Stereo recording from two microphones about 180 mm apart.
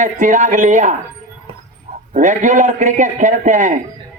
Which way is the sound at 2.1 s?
40° right (ahead or behind).